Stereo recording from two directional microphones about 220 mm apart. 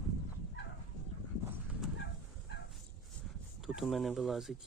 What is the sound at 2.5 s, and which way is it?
Dog, 50° left (ahead or behind).